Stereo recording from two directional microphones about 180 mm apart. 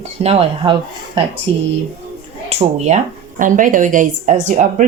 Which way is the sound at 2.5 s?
40° right (ahead or behind).